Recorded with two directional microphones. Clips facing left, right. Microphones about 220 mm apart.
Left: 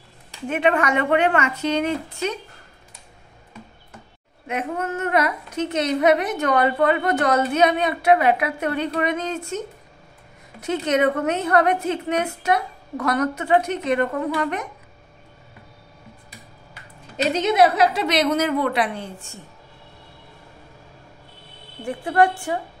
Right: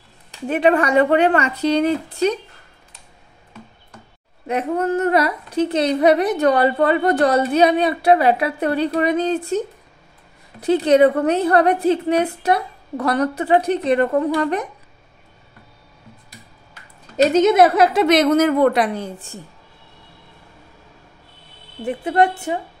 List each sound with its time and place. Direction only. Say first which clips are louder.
0.5 s a woman's voice: right 4 dB; 35° right (ahead or behind)
4.5 s a woman's voice: right 6 dB; 35° right (ahead or behind)
10.6 s a woman's voice: right 7 dB; 35° right (ahead or behind)
17.2 s a woman's voice: right 5 dB; 45° right (ahead or behind)
21.8 s a woman's voice: right 2 dB; 20° right (ahead or behind)